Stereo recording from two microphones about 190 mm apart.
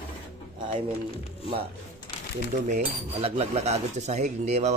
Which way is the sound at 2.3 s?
35° right (ahead or behind).